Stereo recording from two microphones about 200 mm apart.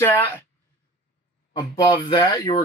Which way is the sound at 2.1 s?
25° left (ahead or behind).